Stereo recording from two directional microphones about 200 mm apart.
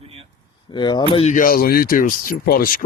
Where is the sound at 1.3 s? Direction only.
45° left (ahead or behind).